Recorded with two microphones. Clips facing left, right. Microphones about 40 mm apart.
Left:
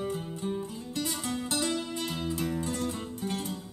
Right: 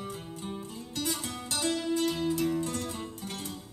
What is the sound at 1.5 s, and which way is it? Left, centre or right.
Music, left.